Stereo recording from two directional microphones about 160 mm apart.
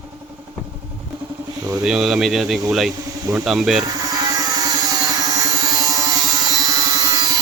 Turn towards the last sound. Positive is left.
turn(degrees=-20)  # may be behind; listen again after turning